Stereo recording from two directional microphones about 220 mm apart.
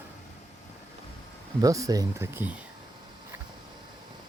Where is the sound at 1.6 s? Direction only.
15° right (ahead or behind).